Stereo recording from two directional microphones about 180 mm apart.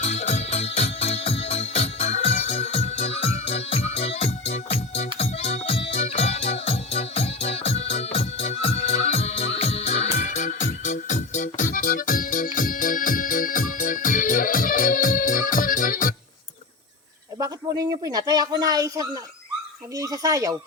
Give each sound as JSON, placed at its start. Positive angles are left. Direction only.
{"t": 0.0, "sound": "music", "side_deg": 40}
{"t": 18.0, "sound": "speech", "side_deg": -20}